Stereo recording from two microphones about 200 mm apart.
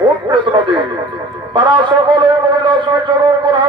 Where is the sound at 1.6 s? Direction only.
25° right (ahead or behind).